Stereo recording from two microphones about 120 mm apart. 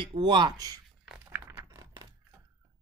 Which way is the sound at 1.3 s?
25° right (ahead or behind).